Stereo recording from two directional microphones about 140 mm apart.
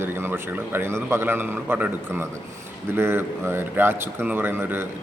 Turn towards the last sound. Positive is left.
turn(degrees=-15)  # may be behind; listen again after turning